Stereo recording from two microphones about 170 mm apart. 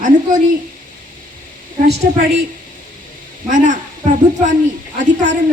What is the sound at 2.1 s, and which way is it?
Speech, 55° right (ahead or behind).